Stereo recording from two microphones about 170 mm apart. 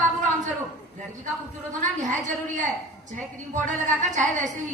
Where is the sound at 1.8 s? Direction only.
45° right (ahead or behind).